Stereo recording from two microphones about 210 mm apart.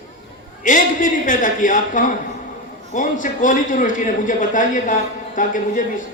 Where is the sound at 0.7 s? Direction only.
40° left (ahead or behind).